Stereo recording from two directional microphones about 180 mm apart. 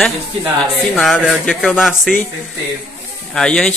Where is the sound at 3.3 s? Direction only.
5° left (ahead or behind).